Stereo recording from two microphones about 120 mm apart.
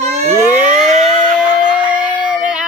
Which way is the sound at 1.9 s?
10° right (ahead or behind).